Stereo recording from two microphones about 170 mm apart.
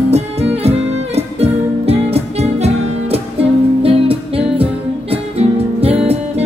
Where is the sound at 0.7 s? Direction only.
35° right (ahead or behind).